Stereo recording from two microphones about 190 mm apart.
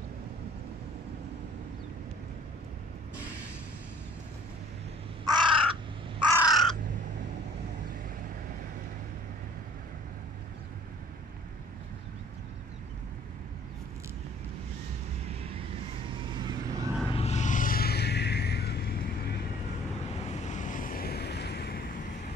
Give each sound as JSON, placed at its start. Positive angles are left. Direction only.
{"t": 5.2, "sound": "crow", "side_deg": -25}
{"t": 6.4, "sound": "crow", "side_deg": 0}
{"t": 16.3, "sound": "vehicle", "side_deg": -20}
{"t": 17.1, "sound": "music", "side_deg": 35}
{"t": 20.2, "sound": "vehicle", "side_deg": 40}